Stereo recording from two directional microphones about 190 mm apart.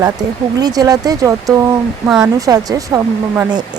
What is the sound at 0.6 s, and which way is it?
Speech, 20° right (ahead or behind).